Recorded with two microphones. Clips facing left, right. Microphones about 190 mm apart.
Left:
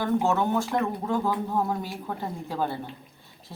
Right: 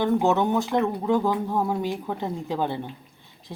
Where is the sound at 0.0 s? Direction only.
20° right (ahead or behind).